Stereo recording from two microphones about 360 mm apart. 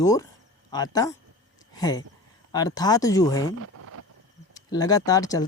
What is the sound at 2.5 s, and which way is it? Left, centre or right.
Speech, centre.